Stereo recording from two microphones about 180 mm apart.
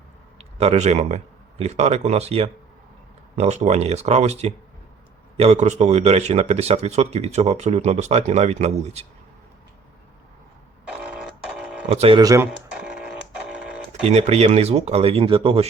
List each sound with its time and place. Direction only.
0.3 s speech: 35° right (ahead or behind)
10.8 s a sound: 5° right (ahead or behind)
11.9 s speech: 35° right (ahead or behind)
12.2 s speech: 20° right (ahead or behind)
12.7 s printer: 5° right (ahead or behind)
13.9 s speech: 35° right (ahead or behind)